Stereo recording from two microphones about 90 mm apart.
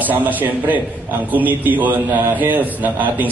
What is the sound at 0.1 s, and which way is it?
A man's voice, 20° right (ahead or behind).